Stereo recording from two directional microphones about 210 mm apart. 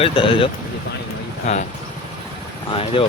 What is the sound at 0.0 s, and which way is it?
Speech, 25° left (ahead or behind).